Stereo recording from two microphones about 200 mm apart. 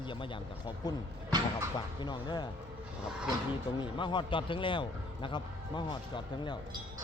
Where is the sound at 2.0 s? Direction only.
20° left (ahead or behind).